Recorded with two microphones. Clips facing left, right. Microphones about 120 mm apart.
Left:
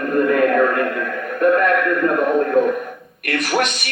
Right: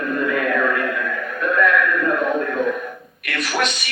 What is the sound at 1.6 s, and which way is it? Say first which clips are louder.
Music: left 1 dB; 50° left (ahead or behind).